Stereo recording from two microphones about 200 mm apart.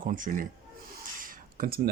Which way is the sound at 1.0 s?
45° right (ahead or behind).